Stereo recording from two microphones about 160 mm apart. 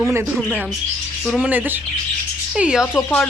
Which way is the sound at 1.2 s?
Centre (ahead or behind).